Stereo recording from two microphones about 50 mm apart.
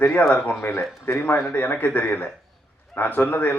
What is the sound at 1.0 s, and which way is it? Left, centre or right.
A man's voice, left.